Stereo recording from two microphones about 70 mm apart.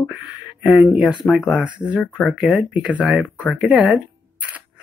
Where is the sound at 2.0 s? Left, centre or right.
Centre.